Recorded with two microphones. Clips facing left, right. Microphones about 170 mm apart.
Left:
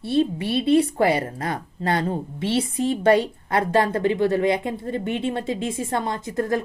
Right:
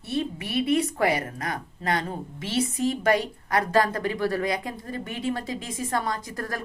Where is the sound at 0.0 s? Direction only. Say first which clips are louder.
Left 8 dB; 30° left (ahead or behind).